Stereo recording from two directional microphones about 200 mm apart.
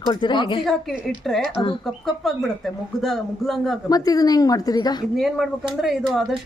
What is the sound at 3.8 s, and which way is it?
A woman's voice, 20° left (ahead or behind).